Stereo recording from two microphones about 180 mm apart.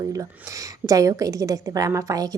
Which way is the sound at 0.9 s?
15° right (ahead or behind).